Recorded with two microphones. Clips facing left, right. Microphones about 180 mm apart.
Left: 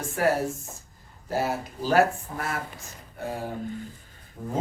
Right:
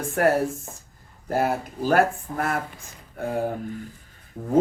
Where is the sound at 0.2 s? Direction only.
55° right (ahead or behind).